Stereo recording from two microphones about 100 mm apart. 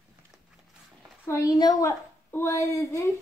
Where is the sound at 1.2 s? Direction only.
25° left (ahead or behind).